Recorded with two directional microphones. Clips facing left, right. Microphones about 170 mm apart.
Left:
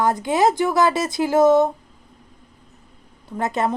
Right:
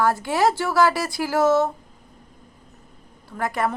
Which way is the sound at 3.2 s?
20° left (ahead or behind).